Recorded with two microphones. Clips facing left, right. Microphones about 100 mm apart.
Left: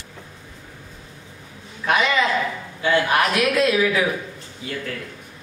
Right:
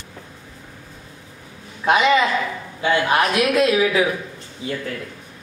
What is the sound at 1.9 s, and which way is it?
A man's voice, 20° right (ahead or behind).